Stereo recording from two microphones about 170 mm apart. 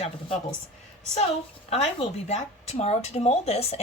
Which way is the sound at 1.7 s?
35° left (ahead or behind).